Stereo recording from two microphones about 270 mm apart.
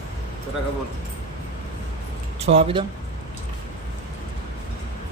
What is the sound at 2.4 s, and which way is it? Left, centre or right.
Speech, right.